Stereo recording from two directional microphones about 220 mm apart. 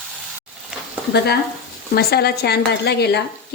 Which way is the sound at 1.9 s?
45° left (ahead or behind).